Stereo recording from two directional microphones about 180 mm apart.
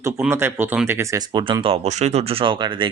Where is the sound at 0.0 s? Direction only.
15° right (ahead or behind).